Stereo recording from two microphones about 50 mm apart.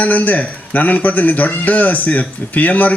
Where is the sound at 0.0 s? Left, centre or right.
Left.